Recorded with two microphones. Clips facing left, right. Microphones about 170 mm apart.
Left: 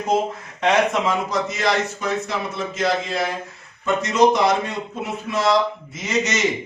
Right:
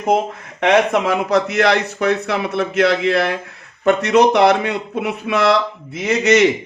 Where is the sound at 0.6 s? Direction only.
65° right (ahead or behind).